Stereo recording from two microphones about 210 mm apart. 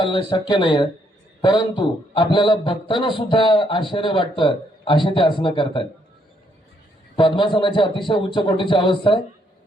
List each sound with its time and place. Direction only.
0.3 s a man's voice: 20° left (ahead or behind)
7.2 s a man's voice: 25° left (ahead or behind)